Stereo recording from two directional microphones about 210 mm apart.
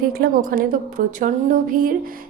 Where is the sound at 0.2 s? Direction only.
40° right (ahead or behind).